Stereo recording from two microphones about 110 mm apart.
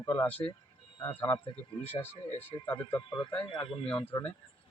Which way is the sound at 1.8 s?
20° left (ahead or behind).